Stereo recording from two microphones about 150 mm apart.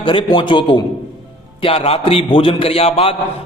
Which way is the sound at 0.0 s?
35° left (ahead or behind).